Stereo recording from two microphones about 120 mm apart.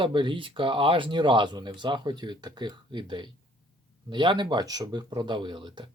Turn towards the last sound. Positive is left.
turn(degrees=-40)  # may be behind; listen again after turning